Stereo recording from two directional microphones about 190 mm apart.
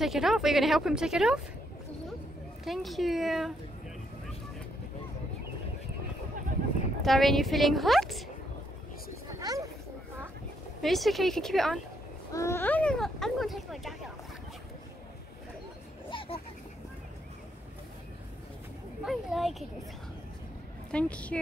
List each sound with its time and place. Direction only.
0.0 s speech: centre (ahead or behind)
2.6 s speech: centre (ahead or behind)
7.0 s speech: centre (ahead or behind)
9.4 s a sound: 20° right (ahead or behind)
10.8 s speech: centre (ahead or behind)
12.3 s speech: 15° left (ahead or behind)
16.1 s a sound: 25° left (ahead or behind)
19.0 s speech: centre (ahead or behind)
20.9 s a woman's voice: 5° left (ahead or behind)